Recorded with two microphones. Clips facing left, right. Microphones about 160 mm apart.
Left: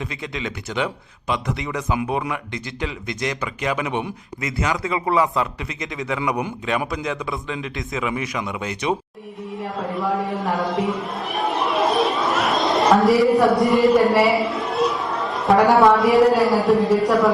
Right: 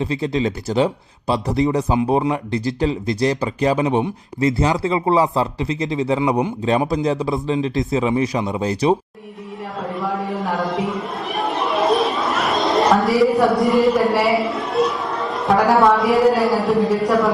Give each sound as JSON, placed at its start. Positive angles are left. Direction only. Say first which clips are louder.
{"t": 0.0, "sound": "speech", "louder": "right 9 dB", "side_deg": -35}
{"t": 9.8, "sound": "a man's voice", "louder": "even", "side_deg": 0}